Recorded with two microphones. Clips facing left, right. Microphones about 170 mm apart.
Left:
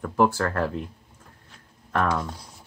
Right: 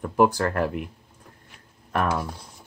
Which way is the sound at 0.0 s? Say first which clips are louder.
Right 2 dB; 15° right (ahead or behind).